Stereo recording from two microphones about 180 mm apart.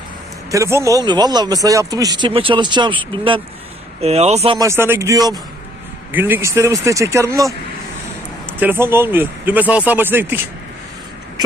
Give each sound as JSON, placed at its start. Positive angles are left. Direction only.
{"t": 0.5, "sound": "speech", "side_deg": -15}
{"t": 4.5, "sound": "speech", "side_deg": -15}
{"t": 8.5, "sound": "speech", "side_deg": -10}